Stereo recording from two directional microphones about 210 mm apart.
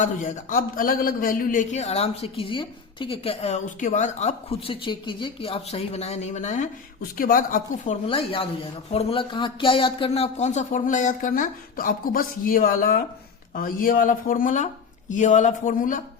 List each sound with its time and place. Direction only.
0.0 s a man's voice: 35° left (ahead or behind)
8.0 s a man's voice: 25° left (ahead or behind)